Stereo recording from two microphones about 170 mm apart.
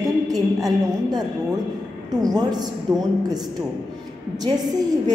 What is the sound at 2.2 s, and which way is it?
Speech, 25° right (ahead or behind).